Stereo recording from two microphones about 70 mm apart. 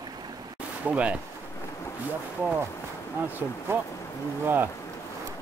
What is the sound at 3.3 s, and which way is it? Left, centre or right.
Speech, right.